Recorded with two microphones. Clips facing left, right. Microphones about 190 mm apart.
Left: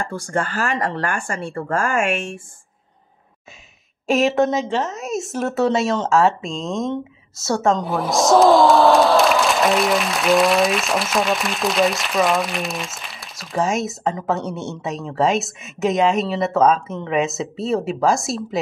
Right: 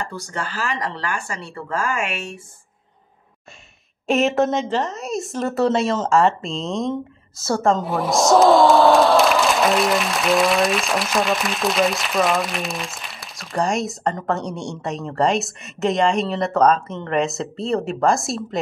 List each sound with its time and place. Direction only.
0.0 s speech: 50° left (ahead or behind)
4.1 s speech: centre (ahead or behind)